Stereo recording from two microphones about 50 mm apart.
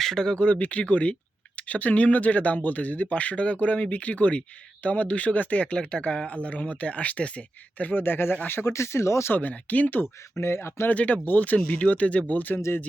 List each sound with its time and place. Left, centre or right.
0.0 s speech: centre
0.3 s speech: left
7.9 s speech: left
8.7 s speech: left
9.3 s speech: left
10.3 s speech: left
10.8 s speech: left
12.5 s speech: left